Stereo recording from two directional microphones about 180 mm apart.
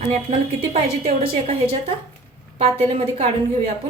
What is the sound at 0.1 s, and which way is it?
A woman's voice, 35° right (ahead or behind).